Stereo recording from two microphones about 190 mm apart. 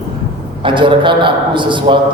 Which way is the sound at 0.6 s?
25° right (ahead or behind).